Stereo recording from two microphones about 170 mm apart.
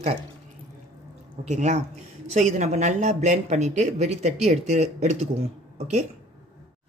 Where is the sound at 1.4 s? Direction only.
45° right (ahead or behind).